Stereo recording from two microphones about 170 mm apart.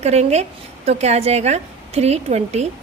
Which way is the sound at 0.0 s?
40° right (ahead or behind).